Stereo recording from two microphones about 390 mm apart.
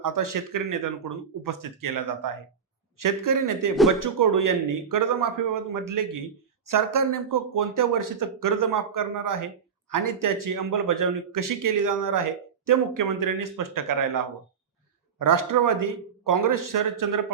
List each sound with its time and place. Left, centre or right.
0.0 s speech: right